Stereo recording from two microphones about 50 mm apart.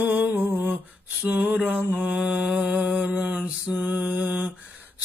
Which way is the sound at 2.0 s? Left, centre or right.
Right.